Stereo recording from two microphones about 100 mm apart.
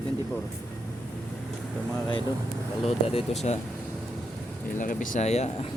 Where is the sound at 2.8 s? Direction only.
80° left.